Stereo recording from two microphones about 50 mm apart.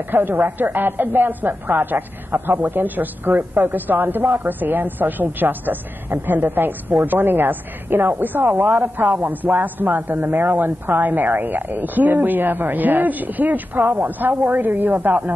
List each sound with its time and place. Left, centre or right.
0.1 s a woman's voice: right